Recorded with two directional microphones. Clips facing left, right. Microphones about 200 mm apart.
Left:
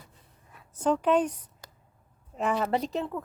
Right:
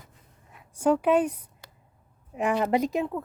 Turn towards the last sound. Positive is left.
turn(degrees=-10)  # may be behind; listen again after turning